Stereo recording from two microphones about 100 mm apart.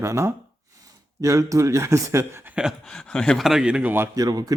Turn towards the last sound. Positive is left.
turn(degrees=-40)  # may be behind; listen again after turning